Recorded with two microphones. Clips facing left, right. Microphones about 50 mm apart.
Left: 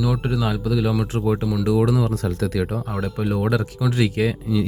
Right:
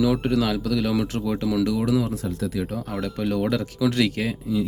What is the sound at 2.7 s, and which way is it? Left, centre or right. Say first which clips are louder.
Speech: left 2 dB; left.